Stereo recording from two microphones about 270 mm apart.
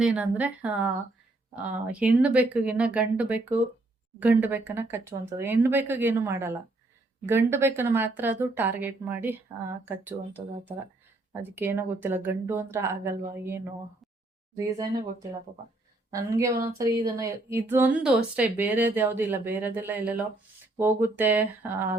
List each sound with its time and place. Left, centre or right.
0.0 s speech: centre
2.0 s a woman's voice: centre
16.1 s a woman's voice: centre